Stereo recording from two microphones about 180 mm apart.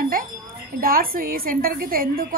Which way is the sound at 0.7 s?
55° right (ahead or behind).